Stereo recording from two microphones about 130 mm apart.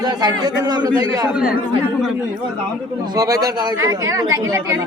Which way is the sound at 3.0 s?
30° right (ahead or behind).